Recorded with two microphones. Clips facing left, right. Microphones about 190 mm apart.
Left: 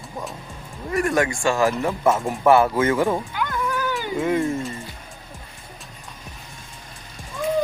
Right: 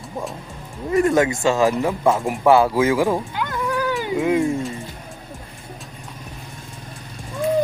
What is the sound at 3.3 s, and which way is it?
Cat, 20° right (ahead or behind).